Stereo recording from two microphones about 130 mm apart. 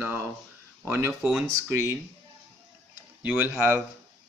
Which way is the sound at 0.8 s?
15° right (ahead or behind).